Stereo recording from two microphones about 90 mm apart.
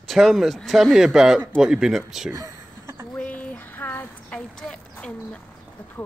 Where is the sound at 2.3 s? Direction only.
40° right (ahead or behind).